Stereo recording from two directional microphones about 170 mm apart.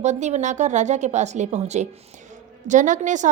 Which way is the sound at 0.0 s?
45° right (ahead or behind).